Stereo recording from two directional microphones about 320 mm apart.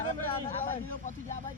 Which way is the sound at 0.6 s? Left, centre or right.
Left.